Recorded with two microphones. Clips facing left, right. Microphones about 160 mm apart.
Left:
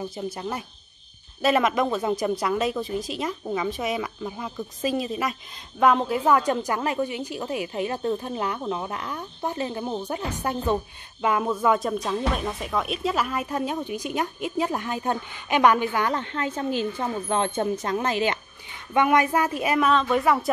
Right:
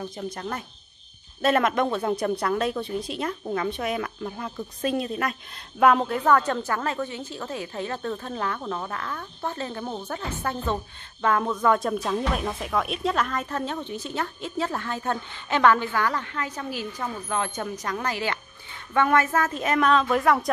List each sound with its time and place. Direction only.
0.0 s a woman's voice: 5° left (ahead or behind)